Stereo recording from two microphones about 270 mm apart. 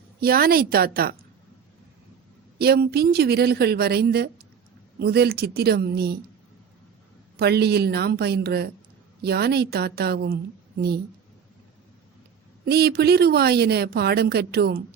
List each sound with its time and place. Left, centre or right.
0.2 s a woman's voice: right
2.6 s a woman's voice: right
7.3 s a woman's voice: right
12.6 s a woman's voice: right